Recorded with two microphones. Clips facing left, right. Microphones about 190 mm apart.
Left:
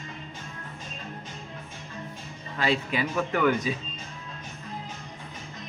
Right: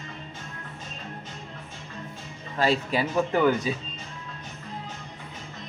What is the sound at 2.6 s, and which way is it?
Speech, 40° right (ahead or behind).